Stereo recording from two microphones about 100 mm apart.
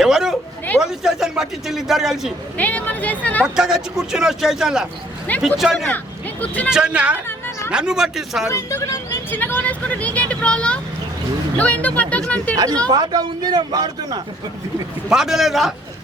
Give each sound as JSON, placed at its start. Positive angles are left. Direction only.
{"t": 0.0, "sound": "a sound", "side_deg": -5}
{"t": 0.8, "sound": "speech", "side_deg": -5}
{"t": 2.6, "sound": "speech", "side_deg": 15}
{"t": 3.4, "sound": "speech", "side_deg": -5}
{"t": 6.4, "sound": "speech", "side_deg": 15}
{"t": 6.7, "sound": "speech", "side_deg": -10}
{"t": 7.3, "sound": "a sound", "side_deg": 20}
{"t": 7.7, "sound": "speech", "side_deg": -10}
{"t": 8.4, "sound": "speech", "side_deg": 30}
{"t": 9.3, "sound": "speech", "side_deg": 20}
{"t": 12.5, "sound": "speech", "side_deg": -40}
{"t": 15.1, "sound": "speech", "side_deg": -5}